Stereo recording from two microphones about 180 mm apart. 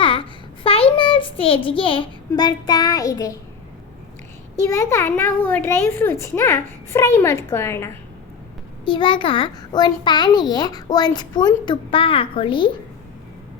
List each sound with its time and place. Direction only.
0.0 s a sound: 30° left (ahead or behind)
4.7 s a child's voice: 15° left (ahead or behind)
8.8 s a child's voice: 25° left (ahead or behind)